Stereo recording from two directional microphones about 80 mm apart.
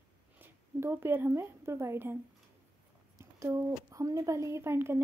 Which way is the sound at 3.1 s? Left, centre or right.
Right.